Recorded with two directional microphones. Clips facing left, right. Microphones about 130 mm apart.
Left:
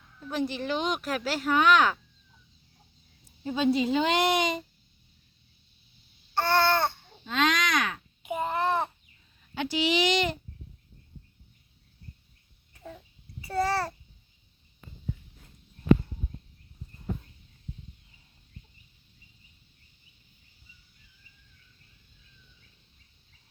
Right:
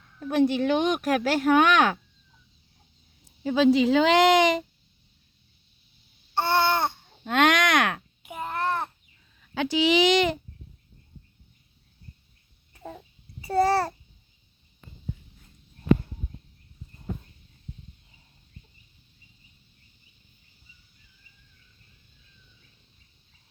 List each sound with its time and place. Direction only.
0.2 s speech: 60° right (ahead or behind)
3.4 s speech: 90° right
6.3 s babbling: 20° right (ahead or behind)
7.3 s a sound: 65° right (ahead or behind)
8.2 s babbling: centre (ahead or behind)
10.1 s speech: 90° right
13.4 s a child's voice: 35° right (ahead or behind)